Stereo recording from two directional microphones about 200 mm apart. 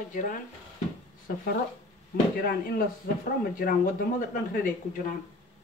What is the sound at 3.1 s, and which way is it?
Speech, 50° left (ahead or behind).